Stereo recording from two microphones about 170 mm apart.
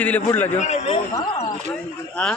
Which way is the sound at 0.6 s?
40° left (ahead or behind).